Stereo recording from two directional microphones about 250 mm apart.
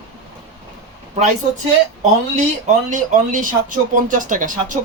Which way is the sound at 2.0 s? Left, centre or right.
Right.